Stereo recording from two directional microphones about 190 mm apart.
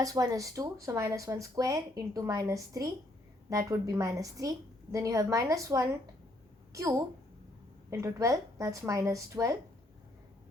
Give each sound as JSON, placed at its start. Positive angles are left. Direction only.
{"t": 0.0, "sound": "speech", "side_deg": -20}